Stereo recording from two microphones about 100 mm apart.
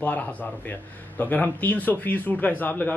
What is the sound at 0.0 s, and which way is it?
Speech, 15° left (ahead or behind).